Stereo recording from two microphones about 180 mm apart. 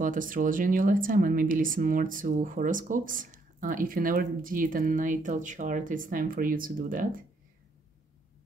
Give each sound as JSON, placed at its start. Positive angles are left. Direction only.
{"t": 0.0, "sound": "speech", "side_deg": -50}